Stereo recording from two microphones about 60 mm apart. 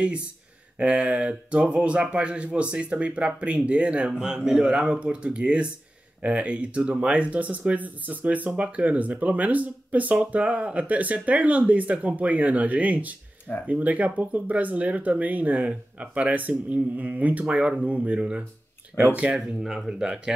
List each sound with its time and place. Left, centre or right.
0.7 s speech: right
19.3 s speech: centre